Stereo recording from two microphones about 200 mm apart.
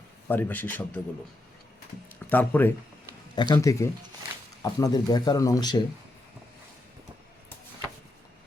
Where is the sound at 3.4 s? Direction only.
20° left (ahead or behind).